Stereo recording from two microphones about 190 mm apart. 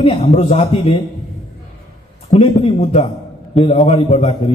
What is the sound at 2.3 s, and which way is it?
Speech, 35° left (ahead or behind).